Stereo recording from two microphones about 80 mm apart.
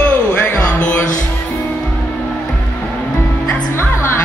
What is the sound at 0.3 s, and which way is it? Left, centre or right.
Music, centre.